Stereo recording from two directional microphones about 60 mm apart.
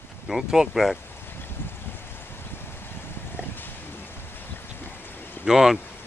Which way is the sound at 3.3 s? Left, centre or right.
Left.